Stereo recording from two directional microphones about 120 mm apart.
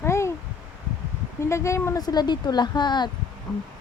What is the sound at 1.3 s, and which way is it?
Speech, 25° left (ahead or behind).